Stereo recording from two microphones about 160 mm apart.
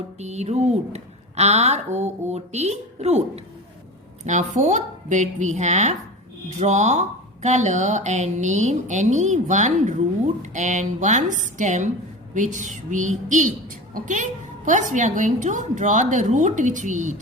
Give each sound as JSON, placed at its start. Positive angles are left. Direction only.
{"t": 0.2, "sound": "a woman's voice", "side_deg": -45}